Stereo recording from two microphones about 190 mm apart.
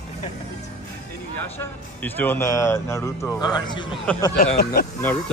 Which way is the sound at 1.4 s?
10° left (ahead or behind).